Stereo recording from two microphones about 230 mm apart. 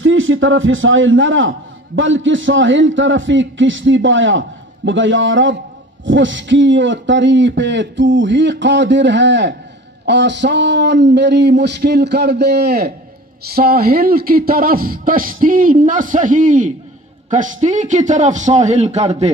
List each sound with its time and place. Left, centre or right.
0.0 s a man's voice: right